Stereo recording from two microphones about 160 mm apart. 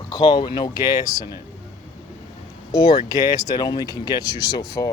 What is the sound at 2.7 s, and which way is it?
Speech, 25° left (ahead or behind).